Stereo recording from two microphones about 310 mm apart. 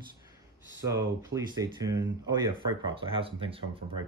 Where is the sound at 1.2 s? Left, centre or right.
Centre.